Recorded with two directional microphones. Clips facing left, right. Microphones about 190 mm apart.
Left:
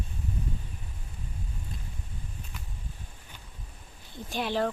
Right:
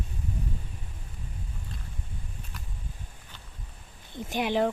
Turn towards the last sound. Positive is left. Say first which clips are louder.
# right 3 dB
turn(degrees=-15)  # may be behind; listen again after turning